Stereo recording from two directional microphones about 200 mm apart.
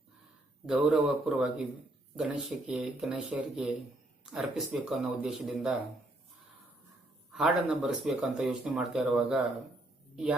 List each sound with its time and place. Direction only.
0.7 s speech: 5° right (ahead or behind)
7.3 s speech: centre (ahead or behind)